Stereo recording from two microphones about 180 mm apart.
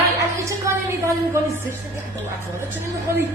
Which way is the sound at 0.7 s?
15° right (ahead or behind).